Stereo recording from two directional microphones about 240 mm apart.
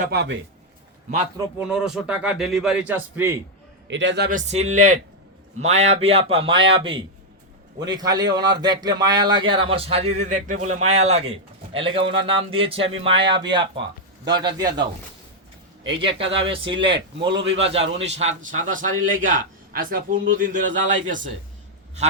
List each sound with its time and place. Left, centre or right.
0.0 s a man's voice: right
1.5 s a man's voice: centre
3.8 s a man's voice: right; by 14.8 s centre
16.5 s a man's voice: right